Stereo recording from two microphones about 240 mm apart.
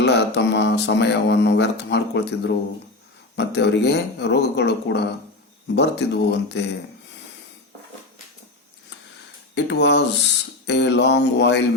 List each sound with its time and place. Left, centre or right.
0.0 s speech: left
9.6 s speech: left